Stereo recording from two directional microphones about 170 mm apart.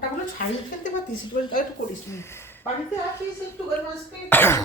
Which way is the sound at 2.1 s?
15° left (ahead or behind).